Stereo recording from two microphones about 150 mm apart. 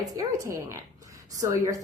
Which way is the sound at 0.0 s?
20° right (ahead or behind).